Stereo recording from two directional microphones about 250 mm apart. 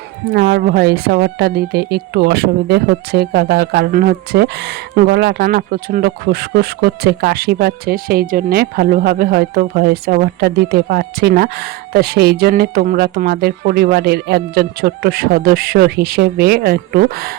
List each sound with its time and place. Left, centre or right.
0.3 s speech: right